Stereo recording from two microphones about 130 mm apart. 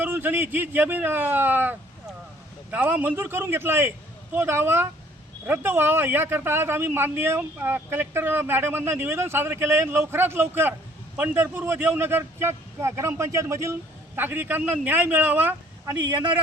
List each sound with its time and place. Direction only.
0.0 s a man's voice: 15° right (ahead or behind)